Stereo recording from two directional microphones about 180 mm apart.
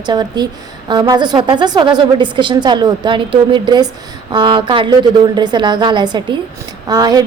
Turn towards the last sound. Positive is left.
turn(degrees=-20)  # may be behind; listen again after turning